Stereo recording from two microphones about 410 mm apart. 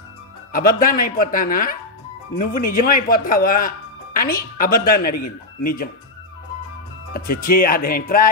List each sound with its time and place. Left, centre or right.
0.5 s speech: left
7.2 s speech: left